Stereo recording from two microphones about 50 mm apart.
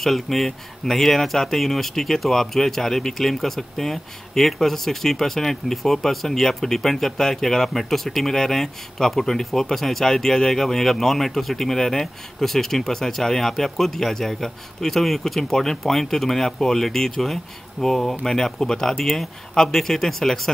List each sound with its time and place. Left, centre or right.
0.0 s speech: centre